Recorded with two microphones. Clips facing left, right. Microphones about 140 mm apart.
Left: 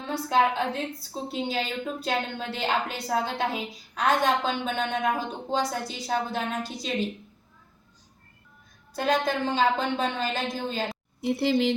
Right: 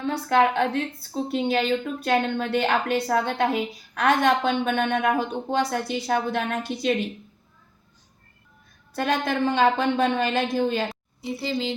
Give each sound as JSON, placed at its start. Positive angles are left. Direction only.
{"t": 0.0, "sound": "a woman's voice", "side_deg": -65}
{"t": 9.0, "sound": "a woman's voice", "side_deg": -65}
{"t": 11.2, "sound": "speech", "side_deg": 65}